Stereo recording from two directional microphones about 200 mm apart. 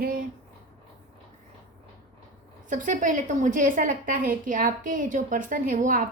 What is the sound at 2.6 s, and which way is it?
A woman's voice, 40° right (ahead or behind).